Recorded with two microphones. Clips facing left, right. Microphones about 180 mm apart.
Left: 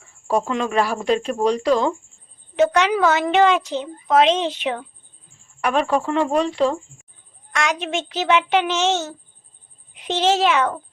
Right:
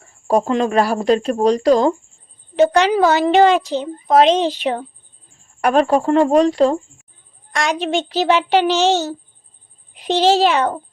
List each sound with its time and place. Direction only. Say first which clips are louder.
0.0 s a woman's voice: right 5 dB; 40° right (ahead or behind)